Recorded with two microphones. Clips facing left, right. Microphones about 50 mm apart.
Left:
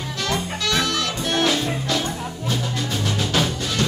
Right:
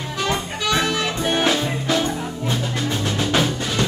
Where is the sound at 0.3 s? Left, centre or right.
Centre.